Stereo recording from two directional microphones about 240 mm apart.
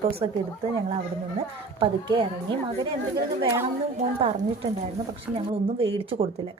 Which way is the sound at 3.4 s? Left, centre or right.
Centre.